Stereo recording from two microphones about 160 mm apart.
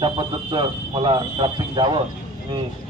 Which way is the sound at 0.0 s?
30° right (ahead or behind).